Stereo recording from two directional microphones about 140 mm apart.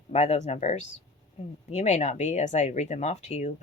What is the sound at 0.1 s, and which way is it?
Speech, 50° left (ahead or behind).